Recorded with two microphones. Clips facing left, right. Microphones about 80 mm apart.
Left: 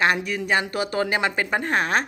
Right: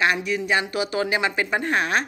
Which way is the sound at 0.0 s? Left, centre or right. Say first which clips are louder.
Even; left.